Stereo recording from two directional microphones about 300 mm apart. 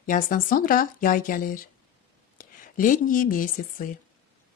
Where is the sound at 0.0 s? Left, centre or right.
Left.